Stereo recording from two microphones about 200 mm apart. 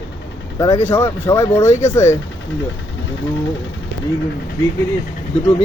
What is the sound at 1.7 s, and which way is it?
Speech, 35° left (ahead or behind).